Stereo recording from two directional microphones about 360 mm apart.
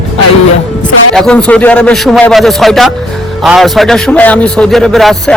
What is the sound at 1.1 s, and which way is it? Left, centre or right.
A man's voice, centre.